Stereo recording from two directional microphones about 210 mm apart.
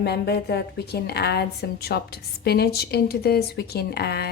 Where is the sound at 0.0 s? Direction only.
50° left (ahead or behind).